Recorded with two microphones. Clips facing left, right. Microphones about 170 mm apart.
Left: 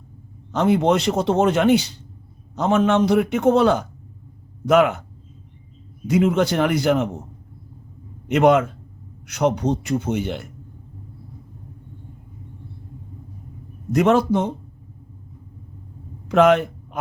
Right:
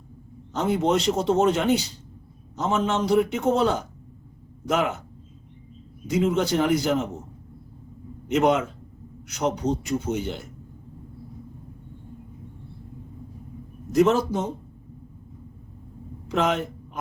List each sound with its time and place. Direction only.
0.5 s speech: 65° left (ahead or behind)
6.1 s speech: 60° left (ahead or behind)
8.3 s speech: 60° left (ahead or behind)
13.9 s speech: 60° left (ahead or behind)
16.3 s speech: 65° left (ahead or behind)